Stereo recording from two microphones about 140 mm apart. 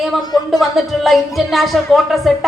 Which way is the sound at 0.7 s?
Centre (ahead or behind).